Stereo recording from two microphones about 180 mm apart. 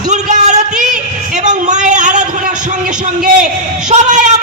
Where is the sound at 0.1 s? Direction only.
40° right (ahead or behind).